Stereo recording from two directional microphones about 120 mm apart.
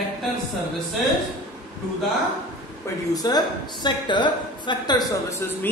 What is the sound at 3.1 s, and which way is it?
A woman's voice, 35° left (ahead or behind).